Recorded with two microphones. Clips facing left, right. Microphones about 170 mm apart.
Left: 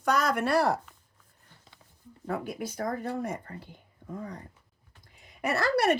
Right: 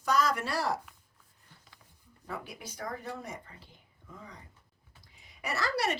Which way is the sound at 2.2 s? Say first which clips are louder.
Left 9 dB; 50° left (ahead or behind).